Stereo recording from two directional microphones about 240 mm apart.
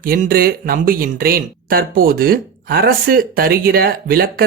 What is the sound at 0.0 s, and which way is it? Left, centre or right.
Speech, right.